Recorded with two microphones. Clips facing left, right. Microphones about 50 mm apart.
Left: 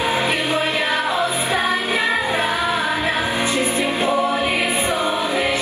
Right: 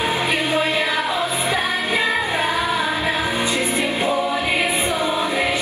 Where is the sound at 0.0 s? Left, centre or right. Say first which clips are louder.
Left 1 dB; left.